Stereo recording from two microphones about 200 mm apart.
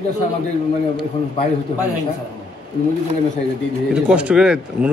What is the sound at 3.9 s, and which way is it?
Speech, 5° right (ahead or behind).